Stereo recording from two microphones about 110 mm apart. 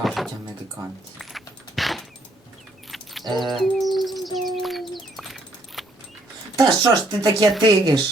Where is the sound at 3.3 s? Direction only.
45° right (ahead or behind).